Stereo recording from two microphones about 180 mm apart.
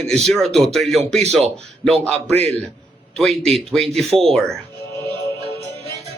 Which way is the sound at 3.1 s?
5° left (ahead or behind).